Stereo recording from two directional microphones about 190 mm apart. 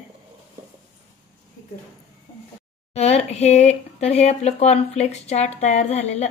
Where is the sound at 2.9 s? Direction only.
35° left (ahead or behind).